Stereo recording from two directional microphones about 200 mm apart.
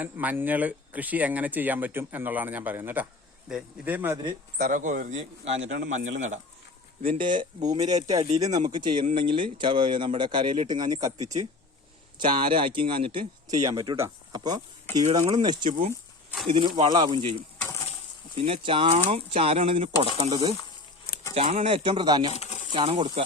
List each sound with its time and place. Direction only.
0.0 s speech: 10° right (ahead or behind)
4.5 s a man's voice: 45° right (ahead or behind)
5.6 s a man's voice: 60° right (ahead or behind)
7.1 s speech: 25° right (ahead or behind)
18.4 s speech: 25° right (ahead or behind)
22.3 s a sound: 35° left (ahead or behind)
22.7 s speech: 25° right (ahead or behind)